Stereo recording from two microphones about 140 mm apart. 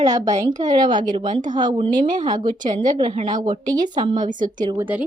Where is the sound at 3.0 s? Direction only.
35° right (ahead or behind).